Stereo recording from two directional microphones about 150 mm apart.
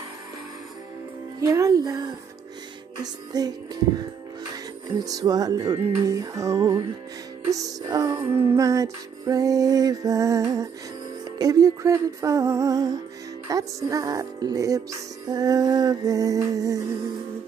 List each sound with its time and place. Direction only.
1.4 s speech: 25° right (ahead or behind)
5.0 s speech: 25° right (ahead or behind)